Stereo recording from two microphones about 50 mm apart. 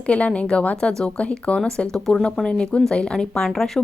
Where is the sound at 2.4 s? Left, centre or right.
Centre.